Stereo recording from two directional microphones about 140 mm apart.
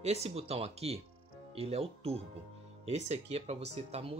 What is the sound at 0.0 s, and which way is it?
Speech, 50° right (ahead or behind).